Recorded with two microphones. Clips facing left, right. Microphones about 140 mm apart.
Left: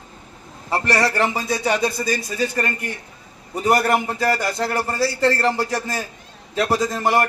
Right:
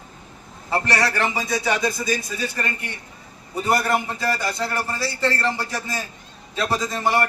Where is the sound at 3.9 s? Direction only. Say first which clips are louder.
Left 3 dB; 45° left (ahead or behind).